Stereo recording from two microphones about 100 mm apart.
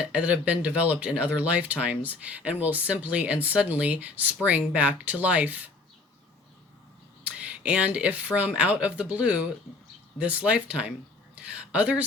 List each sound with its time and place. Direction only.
0.0 s speech: 15° right (ahead or behind)
7.3 s speech: 15° right (ahead or behind)